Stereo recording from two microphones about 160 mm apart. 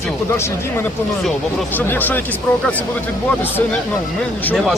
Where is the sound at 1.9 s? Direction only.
10° left (ahead or behind).